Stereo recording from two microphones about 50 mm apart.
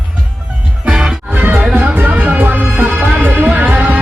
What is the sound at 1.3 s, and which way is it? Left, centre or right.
Music, right.